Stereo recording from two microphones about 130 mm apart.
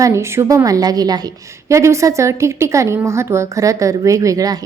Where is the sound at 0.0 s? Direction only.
20° right (ahead or behind).